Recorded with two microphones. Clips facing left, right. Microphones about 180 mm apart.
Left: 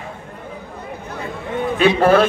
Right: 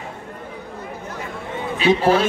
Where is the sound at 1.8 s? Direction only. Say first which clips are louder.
Left 3 dB; 55° left (ahead or behind).